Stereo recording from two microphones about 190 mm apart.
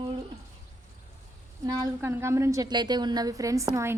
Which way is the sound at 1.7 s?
15° right (ahead or behind).